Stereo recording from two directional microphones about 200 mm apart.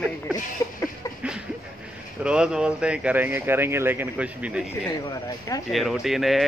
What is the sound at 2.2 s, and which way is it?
Speech, 5° right (ahead or behind).